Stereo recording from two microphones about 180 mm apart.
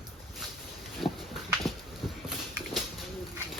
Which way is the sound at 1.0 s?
30° left (ahead or behind).